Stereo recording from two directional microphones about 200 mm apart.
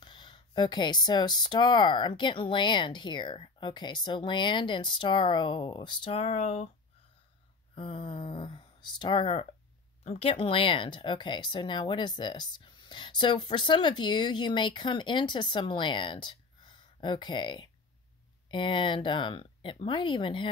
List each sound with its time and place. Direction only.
0.0 s speech: 25° left (ahead or behind)
7.7 s speech: 25° left (ahead or behind)